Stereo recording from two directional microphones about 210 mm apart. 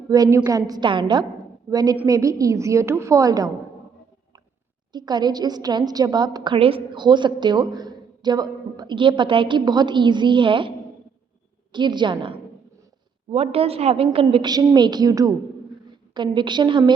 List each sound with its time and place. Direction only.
0.1 s a woman's voice: 15° right (ahead or behind)
4.9 s a woman's voice: 20° right (ahead or behind)
11.7 s a woman's voice: 20° right (ahead or behind)